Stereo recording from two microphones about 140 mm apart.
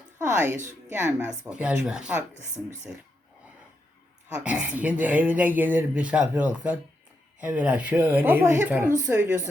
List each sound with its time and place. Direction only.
0.3 s speech: 20° right (ahead or behind)
4.4 s a woman's voice: 10° right (ahead or behind)